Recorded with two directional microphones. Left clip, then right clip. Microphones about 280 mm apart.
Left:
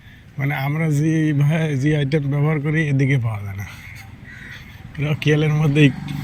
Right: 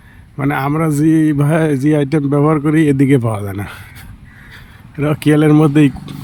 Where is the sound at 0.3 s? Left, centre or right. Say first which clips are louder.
Right 8 dB; centre.